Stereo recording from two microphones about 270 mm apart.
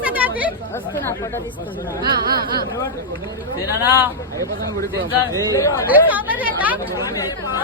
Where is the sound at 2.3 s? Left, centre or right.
Right.